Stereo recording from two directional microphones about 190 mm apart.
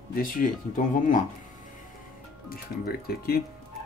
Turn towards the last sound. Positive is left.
turn(degrees=55)  # may be behind; listen again after turning